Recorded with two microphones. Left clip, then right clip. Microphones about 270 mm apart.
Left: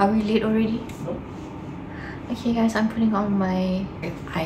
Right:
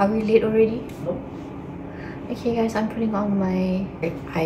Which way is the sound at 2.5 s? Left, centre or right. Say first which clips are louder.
Left 1 dB; centre.